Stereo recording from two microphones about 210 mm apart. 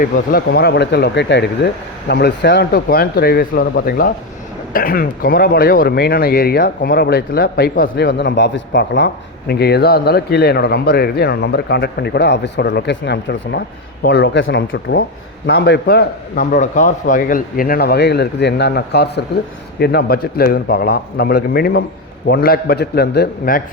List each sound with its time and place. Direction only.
0.0 s speech: 45° left (ahead or behind)